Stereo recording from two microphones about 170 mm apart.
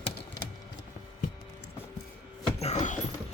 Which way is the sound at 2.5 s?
40° left (ahead or behind).